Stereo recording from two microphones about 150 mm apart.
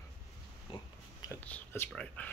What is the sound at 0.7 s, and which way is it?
Oink, 35° left (ahead or behind).